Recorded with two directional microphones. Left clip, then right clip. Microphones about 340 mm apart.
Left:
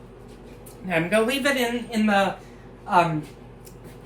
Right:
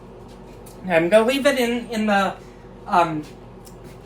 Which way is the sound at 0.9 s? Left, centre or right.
Centre.